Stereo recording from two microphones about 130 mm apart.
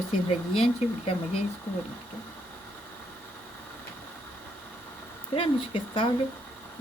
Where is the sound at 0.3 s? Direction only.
50° left (ahead or behind).